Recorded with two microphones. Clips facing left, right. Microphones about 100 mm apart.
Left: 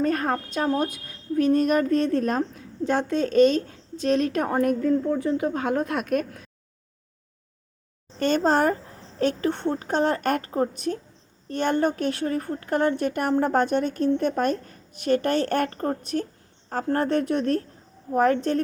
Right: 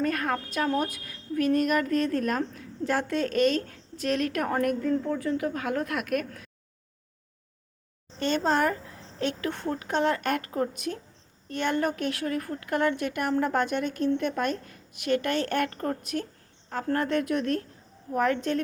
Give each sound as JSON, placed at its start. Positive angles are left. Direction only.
{"t": 0.0, "sound": "speech", "side_deg": 30}
{"t": 8.2, "sound": "a woman's voice", "side_deg": 40}